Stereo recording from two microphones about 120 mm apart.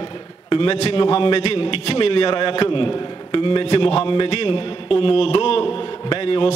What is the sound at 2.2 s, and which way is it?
A man's voice, 40° left (ahead or behind).